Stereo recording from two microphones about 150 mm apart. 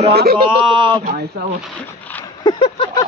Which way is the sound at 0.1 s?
90° right.